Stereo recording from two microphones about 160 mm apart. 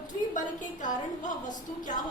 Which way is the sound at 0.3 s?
55° left (ahead or behind).